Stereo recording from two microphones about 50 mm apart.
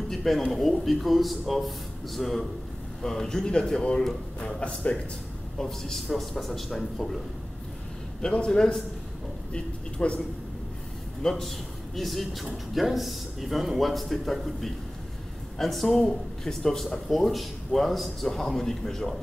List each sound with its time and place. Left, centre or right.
0.1 s a sound: centre
0.4 s a man's voice: centre; by 4.9 s left
5.6 s speech: centre
8.2 s a man's voice: centre
11.2 s speech: centre